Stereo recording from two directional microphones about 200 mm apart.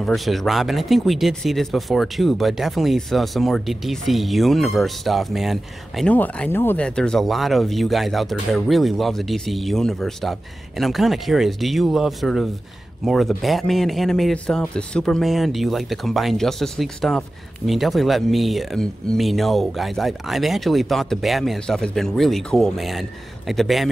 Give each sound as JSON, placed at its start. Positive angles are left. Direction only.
{"t": 0.0, "sound": "speech", "side_deg": 0}